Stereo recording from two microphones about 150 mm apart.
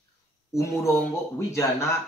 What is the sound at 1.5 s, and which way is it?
Speech, 20° left (ahead or behind).